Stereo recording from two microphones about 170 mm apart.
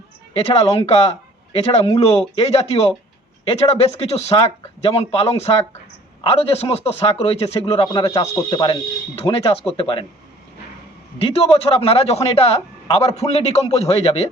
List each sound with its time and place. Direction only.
0.3 s a man's voice: 35° left (ahead or behind)
11.2 s a man's voice: 35° left (ahead or behind)